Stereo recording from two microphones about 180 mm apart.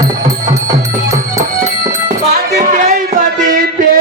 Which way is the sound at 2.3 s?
45° right (ahead or behind).